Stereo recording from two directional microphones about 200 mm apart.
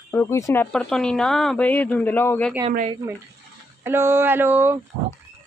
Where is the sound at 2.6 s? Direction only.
30° right (ahead or behind).